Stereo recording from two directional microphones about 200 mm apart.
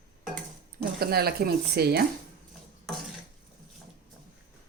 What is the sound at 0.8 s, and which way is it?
Speech, 50° right (ahead or behind).